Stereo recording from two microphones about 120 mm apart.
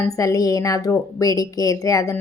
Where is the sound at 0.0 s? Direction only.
25° left (ahead or behind).